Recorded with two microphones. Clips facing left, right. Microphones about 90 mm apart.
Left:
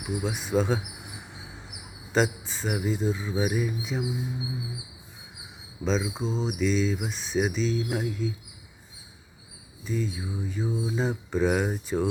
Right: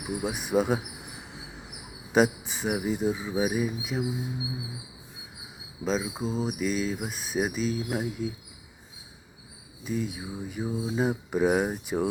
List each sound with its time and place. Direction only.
0.0 s speech: 15° right (ahead or behind)
2.1 s speech: 15° right (ahead or behind)
5.8 s speech: 5° right (ahead or behind)
9.8 s speech: 15° right (ahead or behind)